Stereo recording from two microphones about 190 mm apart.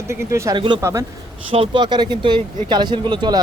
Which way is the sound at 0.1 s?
15° right (ahead or behind).